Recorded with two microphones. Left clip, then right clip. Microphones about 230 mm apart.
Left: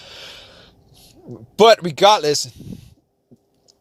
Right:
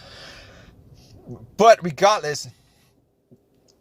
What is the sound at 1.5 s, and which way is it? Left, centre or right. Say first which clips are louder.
Speech: left 2 dB; left.